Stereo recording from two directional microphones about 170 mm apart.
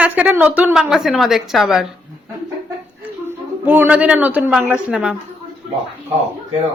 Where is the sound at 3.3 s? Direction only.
10° right (ahead or behind).